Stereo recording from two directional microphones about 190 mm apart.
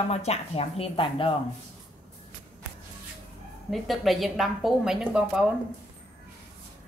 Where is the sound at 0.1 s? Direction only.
35° left (ahead or behind).